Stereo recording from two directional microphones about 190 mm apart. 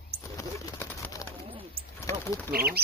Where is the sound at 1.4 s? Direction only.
30° right (ahead or behind).